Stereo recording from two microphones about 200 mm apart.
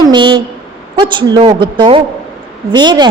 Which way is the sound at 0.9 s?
25° right (ahead or behind).